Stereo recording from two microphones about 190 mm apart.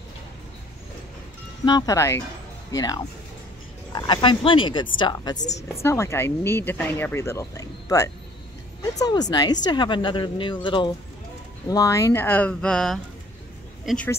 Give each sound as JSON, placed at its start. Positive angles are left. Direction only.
{"t": 1.7, "sound": "speech", "side_deg": 20}